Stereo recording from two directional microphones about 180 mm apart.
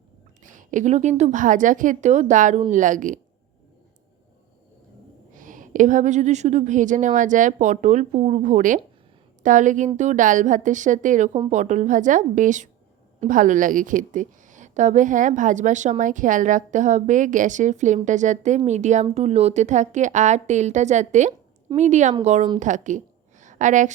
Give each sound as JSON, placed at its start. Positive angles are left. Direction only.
{"t": 0.4, "sound": "a woman's voice", "side_deg": -45}
{"t": 5.3, "sound": "a woman's voice", "side_deg": -45}
{"t": 22.6, "sound": "a sound", "side_deg": -45}